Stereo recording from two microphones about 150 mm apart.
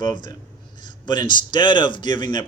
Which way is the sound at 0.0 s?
30° left (ahead or behind).